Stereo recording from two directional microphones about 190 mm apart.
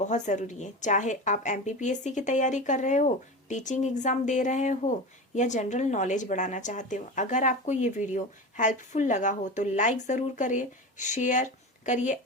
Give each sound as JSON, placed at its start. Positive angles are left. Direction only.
{"t": 0.0, "sound": "speech", "side_deg": 40}